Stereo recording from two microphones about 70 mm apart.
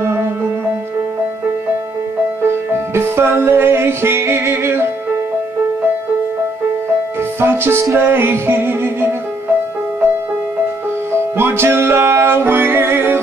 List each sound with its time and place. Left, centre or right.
2.4 s music: right
7.3 s music: right
11.1 s music: right